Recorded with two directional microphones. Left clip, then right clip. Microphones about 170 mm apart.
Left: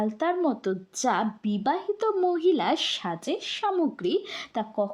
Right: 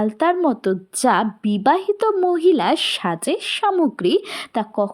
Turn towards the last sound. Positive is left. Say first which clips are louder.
# right 7 dB
turn(degrees=-30)  # may be behind; listen again after turning